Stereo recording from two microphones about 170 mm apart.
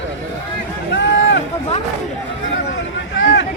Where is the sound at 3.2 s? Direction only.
90° left.